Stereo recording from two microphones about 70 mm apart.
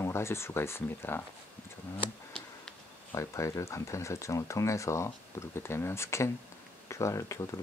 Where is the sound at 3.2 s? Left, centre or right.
Left.